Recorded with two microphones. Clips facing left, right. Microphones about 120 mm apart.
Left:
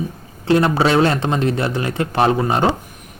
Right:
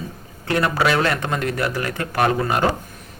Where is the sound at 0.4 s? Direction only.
25° left (ahead or behind).